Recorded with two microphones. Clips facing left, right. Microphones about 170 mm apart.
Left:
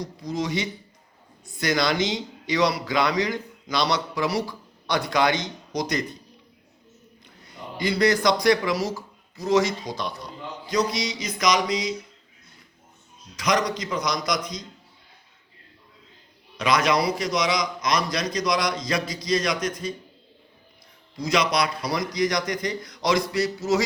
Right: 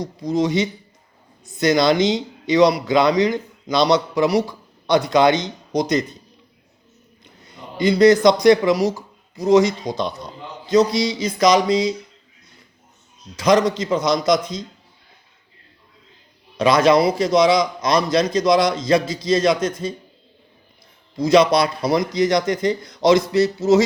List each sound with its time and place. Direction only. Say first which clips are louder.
0.0 s speech: right 8 dB; 20° right (ahead or behind)
7.4 s speech: right 8 dB; 20° right (ahead or behind)
13.3 s speech: right 8 dB; 30° right (ahead or behind)
16.6 s speech: right 7 dB; 30° right (ahead or behind)
21.2 s speech: right 9 dB; 30° right (ahead or behind)